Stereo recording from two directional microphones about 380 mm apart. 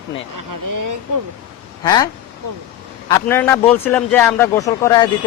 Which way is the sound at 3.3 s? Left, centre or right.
Centre.